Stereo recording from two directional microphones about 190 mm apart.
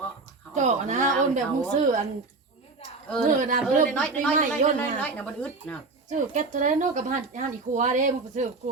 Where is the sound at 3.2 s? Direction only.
40° right (ahead or behind).